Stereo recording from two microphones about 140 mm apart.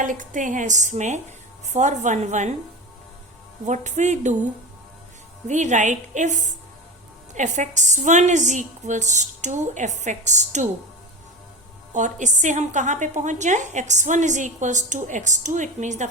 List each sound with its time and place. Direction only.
0.0 s a woman's voice: 70° right (ahead or behind)
3.7 s a woman's voice: 55° right (ahead or behind)
5.5 s a woman's voice: 60° right (ahead or behind)
11.9 s a woman's voice: 60° right (ahead or behind)